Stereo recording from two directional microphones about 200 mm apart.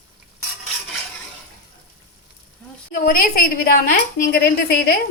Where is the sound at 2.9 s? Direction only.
45° left (ahead or behind).